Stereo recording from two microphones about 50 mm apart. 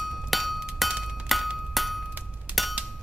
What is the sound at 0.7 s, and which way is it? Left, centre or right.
Music, centre.